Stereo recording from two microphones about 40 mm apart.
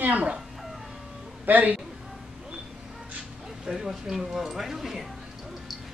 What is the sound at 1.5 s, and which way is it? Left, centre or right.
Speech, right.